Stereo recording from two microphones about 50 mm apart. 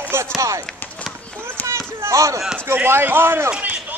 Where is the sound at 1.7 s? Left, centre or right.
Right.